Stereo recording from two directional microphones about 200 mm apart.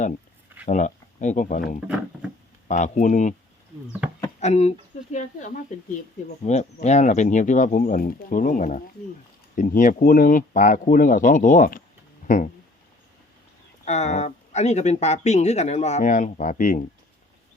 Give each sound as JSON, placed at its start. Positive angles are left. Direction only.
{"t": 0.6, "sound": "speech", "side_deg": 40}
{"t": 4.0, "sound": "a sound", "side_deg": -5}
{"t": 4.4, "sound": "speech", "side_deg": 35}
{"t": 13.8, "sound": "speech", "side_deg": 35}